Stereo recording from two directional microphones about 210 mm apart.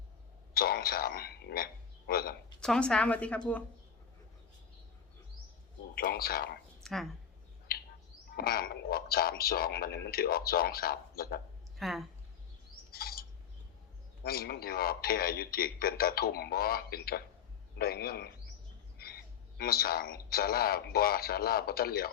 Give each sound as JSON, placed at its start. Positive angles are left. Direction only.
{"t": 0.5, "sound": "a man's voice", "side_deg": 45}
{"t": 2.6, "sound": "speech", "side_deg": 5}
{"t": 5.9, "sound": "speech", "side_deg": 45}
{"t": 6.8, "sound": "speech", "side_deg": 0}
{"t": 7.7, "sound": "bird", "side_deg": 45}
{"t": 8.4, "sound": "speech", "side_deg": 45}
{"t": 11.8, "sound": "speech", "side_deg": 0}
{"t": 12.9, "sound": "bird", "side_deg": 45}
{"t": 14.3, "sound": "speech", "side_deg": 45}